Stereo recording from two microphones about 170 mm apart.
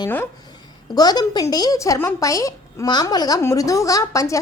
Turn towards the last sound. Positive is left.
turn(degrees=20)  # may be behind; listen again after turning